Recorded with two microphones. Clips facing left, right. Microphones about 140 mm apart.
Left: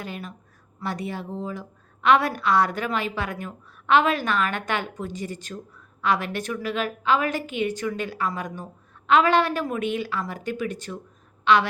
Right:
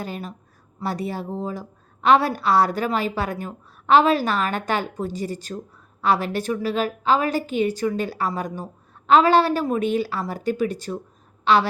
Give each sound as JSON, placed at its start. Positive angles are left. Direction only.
{"t": 0.0, "sound": "a woman's voice", "side_deg": -35}